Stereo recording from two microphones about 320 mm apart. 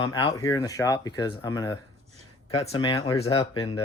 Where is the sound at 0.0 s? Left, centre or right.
Centre.